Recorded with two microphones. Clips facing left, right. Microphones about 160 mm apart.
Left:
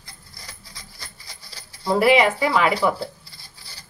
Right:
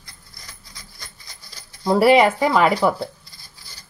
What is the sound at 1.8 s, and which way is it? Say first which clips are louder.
Speech: right 3 dB; 45° right (ahead or behind).